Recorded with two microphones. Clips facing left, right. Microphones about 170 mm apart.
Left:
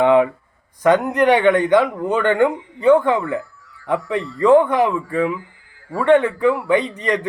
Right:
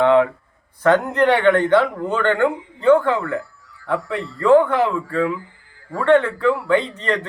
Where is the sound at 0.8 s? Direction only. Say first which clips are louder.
Left 1 dB; 15° left (ahead or behind).